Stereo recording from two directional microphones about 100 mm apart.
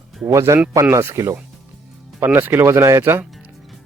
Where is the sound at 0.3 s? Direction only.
30° right (ahead or behind).